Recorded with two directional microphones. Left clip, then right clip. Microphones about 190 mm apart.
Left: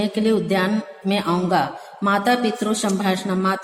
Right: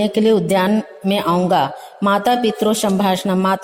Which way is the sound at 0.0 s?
35° right (ahead or behind).